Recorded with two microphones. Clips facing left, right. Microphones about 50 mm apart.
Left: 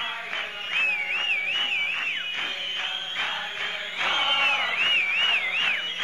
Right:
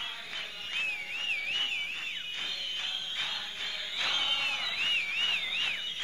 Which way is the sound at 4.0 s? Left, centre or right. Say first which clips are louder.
Left 8 dB; left.